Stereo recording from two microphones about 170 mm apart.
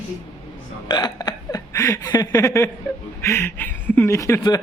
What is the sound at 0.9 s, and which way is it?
Hiccup, 25° left (ahead or behind).